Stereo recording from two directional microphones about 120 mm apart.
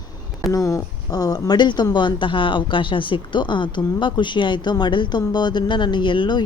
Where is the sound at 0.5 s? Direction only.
30° left (ahead or behind).